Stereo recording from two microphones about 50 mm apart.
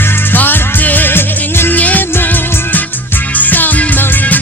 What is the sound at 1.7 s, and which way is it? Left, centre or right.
Music, left.